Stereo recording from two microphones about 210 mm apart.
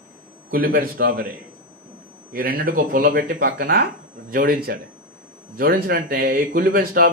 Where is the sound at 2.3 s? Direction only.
45° right (ahead or behind).